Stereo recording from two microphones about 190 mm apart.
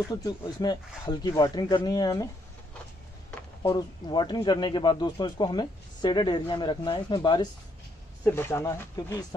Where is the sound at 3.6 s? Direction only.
25° left (ahead or behind).